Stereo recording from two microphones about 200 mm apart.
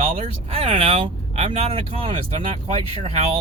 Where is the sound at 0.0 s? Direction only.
30° right (ahead or behind).